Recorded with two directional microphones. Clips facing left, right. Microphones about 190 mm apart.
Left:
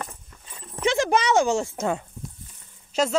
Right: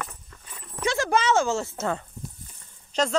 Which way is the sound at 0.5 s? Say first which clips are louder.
Left 4 dB; 20° left (ahead or behind).